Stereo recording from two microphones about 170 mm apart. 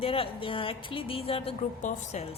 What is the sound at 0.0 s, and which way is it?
A woman's voice, 35° left (ahead or behind).